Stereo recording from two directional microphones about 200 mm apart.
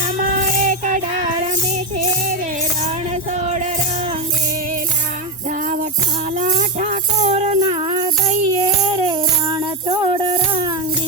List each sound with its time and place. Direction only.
0.7 s music: 40° right (ahead or behind)
6.4 s music: 40° right (ahead or behind)